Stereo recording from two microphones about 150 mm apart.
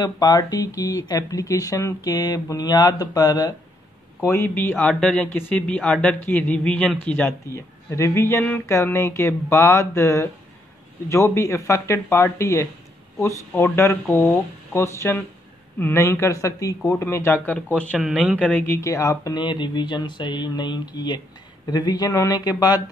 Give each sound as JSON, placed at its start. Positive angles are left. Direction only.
{"t": 0.0, "sound": "speech", "side_deg": 25}
{"t": 17.7, "sound": "speech", "side_deg": 0}
{"t": 18.4, "sound": "speech", "side_deg": 15}